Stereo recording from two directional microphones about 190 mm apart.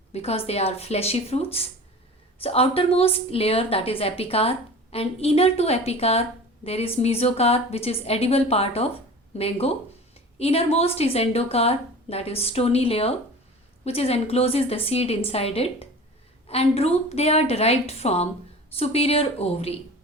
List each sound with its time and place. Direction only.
0.1 s a woman's voice: 30° left (ahead or behind)